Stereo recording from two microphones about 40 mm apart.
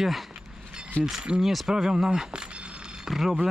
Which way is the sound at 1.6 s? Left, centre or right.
Centre.